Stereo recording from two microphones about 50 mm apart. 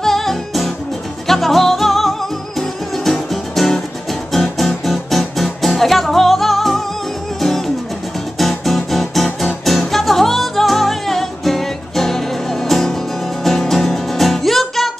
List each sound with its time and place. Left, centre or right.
0.0 s music: centre